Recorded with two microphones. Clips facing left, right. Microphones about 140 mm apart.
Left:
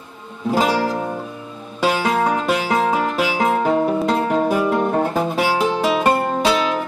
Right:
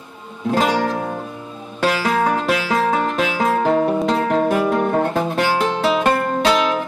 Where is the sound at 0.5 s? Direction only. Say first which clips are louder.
Even; 5° left (ahead or behind).